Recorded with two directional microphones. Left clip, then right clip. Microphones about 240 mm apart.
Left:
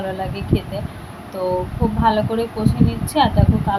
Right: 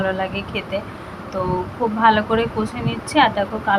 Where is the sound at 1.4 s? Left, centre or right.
Right.